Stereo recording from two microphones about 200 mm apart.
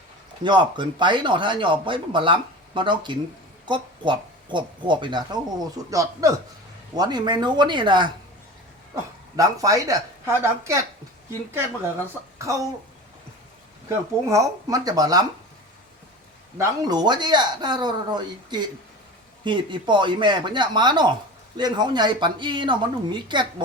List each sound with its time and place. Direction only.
0.4 s speech: 20° right (ahead or behind)
9.3 s a woman's voice: 15° right (ahead or behind)
12.4 s speech: 15° right (ahead or behind)
13.8 s a woman's voice: 15° right (ahead or behind)
16.6 s speech: 20° right (ahead or behind)